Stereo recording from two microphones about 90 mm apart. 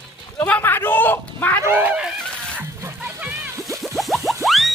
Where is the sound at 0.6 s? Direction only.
25° left (ahead or behind).